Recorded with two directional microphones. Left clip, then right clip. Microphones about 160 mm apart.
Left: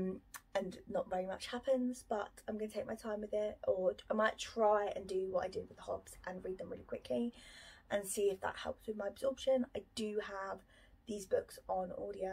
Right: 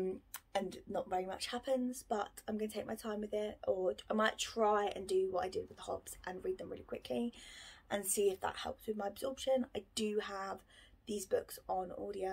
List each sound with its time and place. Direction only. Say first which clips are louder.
0.0 s speech: right 3 dB; 20° right (ahead or behind)